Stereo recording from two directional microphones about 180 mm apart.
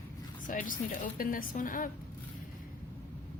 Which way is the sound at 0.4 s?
50° left (ahead or behind).